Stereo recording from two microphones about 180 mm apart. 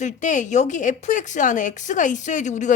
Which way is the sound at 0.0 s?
45° left (ahead or behind).